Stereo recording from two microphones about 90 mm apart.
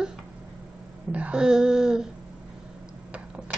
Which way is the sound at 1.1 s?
10° right (ahead or behind).